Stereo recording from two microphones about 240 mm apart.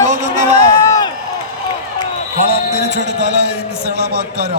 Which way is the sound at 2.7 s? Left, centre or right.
Right.